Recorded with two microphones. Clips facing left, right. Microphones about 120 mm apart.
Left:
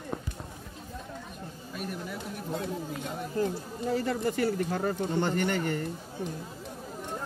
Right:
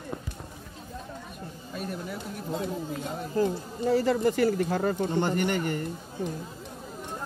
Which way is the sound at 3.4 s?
90° right.